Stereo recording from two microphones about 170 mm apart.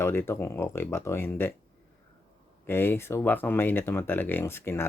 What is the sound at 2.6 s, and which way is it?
Speech, 15° left (ahead or behind).